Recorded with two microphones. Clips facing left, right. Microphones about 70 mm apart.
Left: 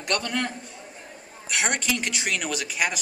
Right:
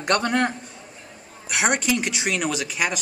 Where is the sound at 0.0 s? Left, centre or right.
Right.